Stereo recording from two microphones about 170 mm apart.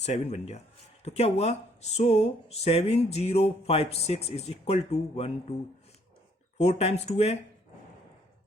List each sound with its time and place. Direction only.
0.0 s speech: 40° left (ahead or behind)
6.6 s speech: 40° left (ahead or behind)